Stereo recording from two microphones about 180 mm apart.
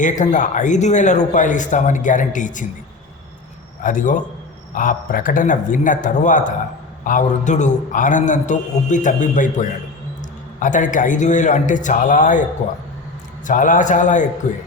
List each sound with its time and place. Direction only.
0.0 s a man's voice: 45° left (ahead or behind)
3.8 s a man's voice: 45° left (ahead or behind)
13.5 s a man's voice: 45° left (ahead or behind)